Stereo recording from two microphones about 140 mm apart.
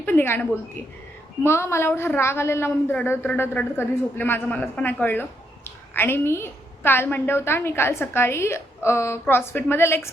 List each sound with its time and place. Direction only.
0.0 s a woman's voice: 15° left (ahead or behind)